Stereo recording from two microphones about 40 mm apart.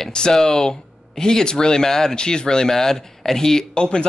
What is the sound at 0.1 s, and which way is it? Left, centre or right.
Speech, centre.